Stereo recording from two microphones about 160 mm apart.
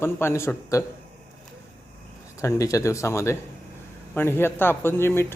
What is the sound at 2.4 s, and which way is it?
Speech, 20° left (ahead or behind).